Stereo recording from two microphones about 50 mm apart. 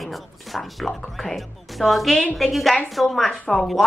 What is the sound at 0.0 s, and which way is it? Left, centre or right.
Speech, centre.